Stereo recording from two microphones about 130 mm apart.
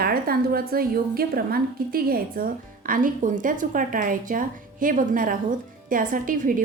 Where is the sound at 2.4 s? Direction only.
90° right.